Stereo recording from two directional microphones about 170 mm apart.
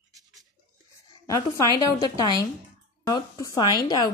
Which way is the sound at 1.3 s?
20° left (ahead or behind).